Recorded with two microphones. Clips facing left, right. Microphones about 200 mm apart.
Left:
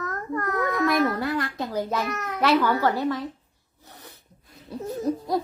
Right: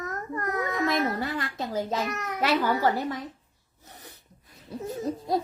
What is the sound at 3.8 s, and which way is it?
Sneeze, 20° right (ahead or behind).